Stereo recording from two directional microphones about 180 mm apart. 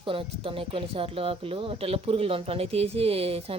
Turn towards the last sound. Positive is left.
turn(degrees=-35)  # may be behind; listen again after turning